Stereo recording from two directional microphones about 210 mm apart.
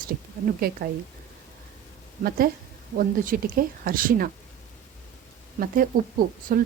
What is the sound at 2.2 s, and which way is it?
Speech, 45° right (ahead or behind).